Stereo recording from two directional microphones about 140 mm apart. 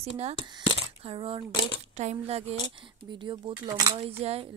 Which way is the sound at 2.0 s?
50° right (ahead or behind).